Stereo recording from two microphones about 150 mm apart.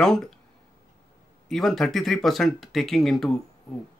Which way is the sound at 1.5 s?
Centre (ahead or behind).